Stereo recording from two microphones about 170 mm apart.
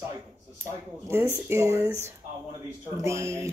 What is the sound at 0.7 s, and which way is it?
Speech, 15° right (ahead or behind).